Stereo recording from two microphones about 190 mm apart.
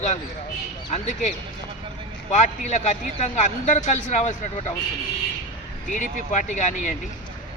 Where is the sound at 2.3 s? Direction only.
35° left (ahead or behind).